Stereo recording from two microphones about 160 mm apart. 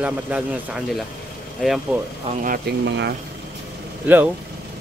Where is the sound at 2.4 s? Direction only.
75° right (ahead or behind).